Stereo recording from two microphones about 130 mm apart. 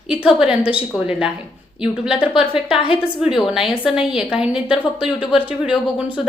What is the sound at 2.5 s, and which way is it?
Speech, 40° left (ahead or behind).